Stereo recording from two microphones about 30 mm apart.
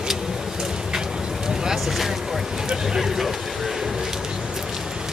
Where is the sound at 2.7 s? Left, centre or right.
Centre.